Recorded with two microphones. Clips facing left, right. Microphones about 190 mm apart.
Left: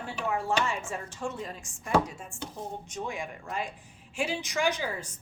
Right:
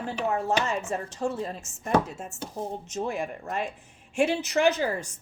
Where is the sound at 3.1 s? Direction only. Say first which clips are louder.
Right 5 dB; 65° right (ahead or behind).